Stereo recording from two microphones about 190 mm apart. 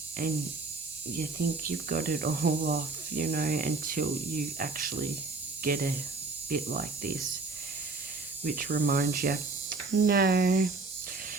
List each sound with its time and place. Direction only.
1.1 s speech: 50° right (ahead or behind)
8.4 s speech: 50° right (ahead or behind)